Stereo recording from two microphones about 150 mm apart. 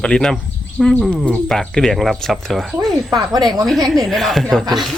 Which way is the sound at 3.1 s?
25° right (ahead or behind).